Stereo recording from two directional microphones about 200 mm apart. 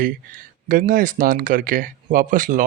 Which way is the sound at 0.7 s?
40° right (ahead or behind).